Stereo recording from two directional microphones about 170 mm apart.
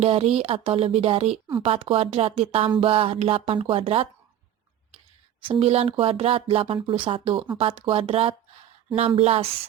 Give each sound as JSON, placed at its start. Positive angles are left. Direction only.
{"t": 0.0, "sound": "speech", "side_deg": -35}
{"t": 5.5, "sound": "speech", "side_deg": -35}